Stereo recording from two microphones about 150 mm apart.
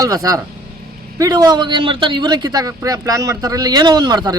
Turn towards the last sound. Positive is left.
turn(degrees=-30)  # may be behind; listen again after turning